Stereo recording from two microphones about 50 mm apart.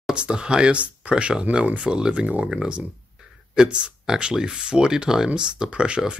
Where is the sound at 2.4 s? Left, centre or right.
Centre.